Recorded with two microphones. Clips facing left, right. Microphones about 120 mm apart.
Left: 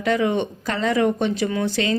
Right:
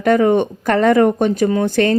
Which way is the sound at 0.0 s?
45° right (ahead or behind).